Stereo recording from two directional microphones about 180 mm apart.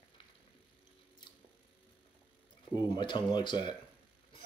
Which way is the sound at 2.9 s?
25° left (ahead or behind).